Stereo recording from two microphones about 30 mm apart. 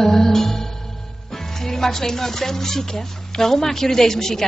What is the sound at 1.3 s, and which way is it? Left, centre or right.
Speech, centre.